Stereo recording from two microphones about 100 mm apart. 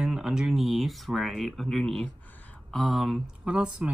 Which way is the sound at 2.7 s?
Centre (ahead or behind).